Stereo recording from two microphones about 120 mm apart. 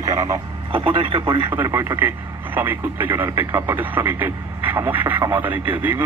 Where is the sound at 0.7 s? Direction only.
50° right (ahead or behind).